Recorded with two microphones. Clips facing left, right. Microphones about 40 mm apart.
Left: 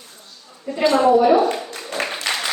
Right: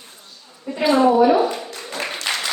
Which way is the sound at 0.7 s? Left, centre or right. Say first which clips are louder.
Left 1 dB; centre.